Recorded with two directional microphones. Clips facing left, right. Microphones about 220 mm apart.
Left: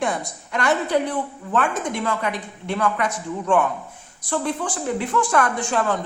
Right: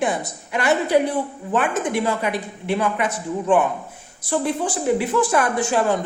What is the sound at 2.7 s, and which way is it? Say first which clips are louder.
Speech: even; 20° right (ahead or behind).